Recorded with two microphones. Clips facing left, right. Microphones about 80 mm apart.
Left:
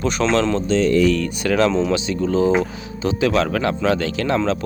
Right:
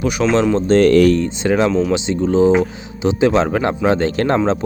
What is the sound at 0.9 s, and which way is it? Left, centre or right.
Speech, right.